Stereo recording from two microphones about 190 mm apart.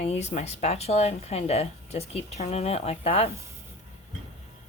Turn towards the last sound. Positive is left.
turn(degrees=30)  # may be behind; listen again after turning